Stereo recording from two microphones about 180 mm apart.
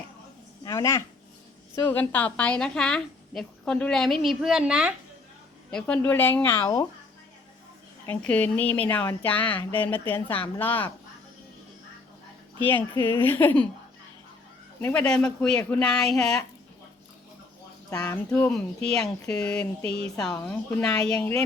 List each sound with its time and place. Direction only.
0.6 s a sound: 20° left (ahead or behind)
1.7 s a woman's voice: 10° left (ahead or behind); by 4.9 s 5° right (ahead or behind)
5.7 s a woman's voice: 10° left (ahead or behind)
8.0 s a woman's voice: 10° left (ahead or behind)
12.9 s a woman's voice: 15° left (ahead or behind)
14.8 s a woman's voice: 10° left (ahead or behind)
17.9 s a woman's voice: 10° left (ahead or behind)